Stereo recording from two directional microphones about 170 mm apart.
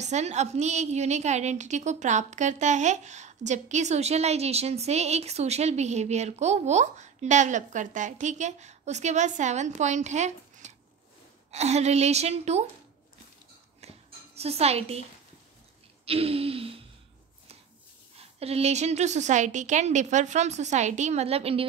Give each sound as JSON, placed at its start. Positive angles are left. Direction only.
{"t": 0.0, "sound": "a woman's voice", "side_deg": -40}
{"t": 13.7, "sound": "a sound", "side_deg": -40}
{"t": 16.1, "sound": "a woman's voice", "side_deg": -35}
{"t": 18.1, "sound": "a woman's voice", "side_deg": -35}